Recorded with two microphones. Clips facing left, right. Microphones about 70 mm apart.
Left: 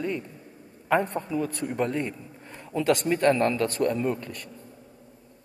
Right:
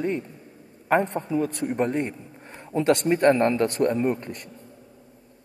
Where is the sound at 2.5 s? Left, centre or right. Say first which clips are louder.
Right 3 dB; right.